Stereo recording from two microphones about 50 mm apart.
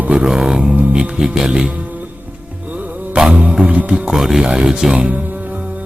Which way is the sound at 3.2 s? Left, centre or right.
Right.